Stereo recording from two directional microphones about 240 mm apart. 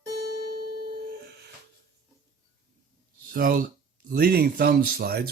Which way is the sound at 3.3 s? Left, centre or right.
Right.